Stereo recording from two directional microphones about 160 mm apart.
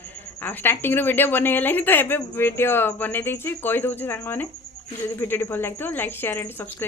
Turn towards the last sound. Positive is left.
turn(degrees=15)  # may be behind; listen again after turning